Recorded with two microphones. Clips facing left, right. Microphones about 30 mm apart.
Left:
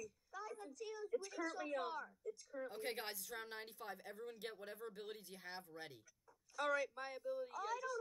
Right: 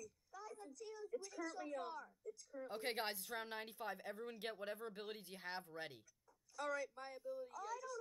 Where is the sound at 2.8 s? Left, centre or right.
Right.